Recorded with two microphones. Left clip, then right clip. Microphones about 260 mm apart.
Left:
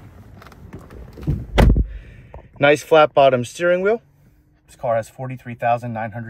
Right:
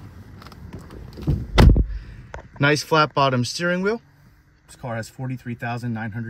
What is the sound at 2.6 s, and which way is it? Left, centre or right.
Speech, centre.